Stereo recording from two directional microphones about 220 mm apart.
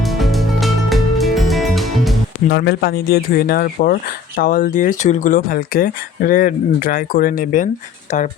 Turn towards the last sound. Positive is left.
turn(degrees=40)  # may be behind; listen again after turning